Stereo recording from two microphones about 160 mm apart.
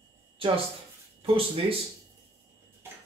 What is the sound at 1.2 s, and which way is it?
Speech, 35° right (ahead or behind).